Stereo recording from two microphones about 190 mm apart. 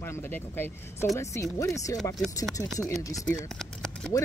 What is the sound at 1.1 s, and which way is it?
Speech, 15° left (ahead or behind).